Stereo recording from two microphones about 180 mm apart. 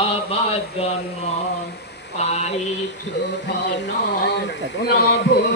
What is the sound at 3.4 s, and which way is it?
Speech, 70° left (ahead or behind).